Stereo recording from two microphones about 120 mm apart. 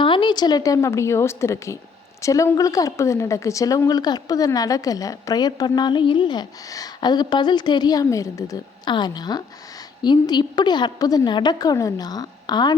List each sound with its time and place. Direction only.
0.0 s a woman's voice: 40° left (ahead or behind)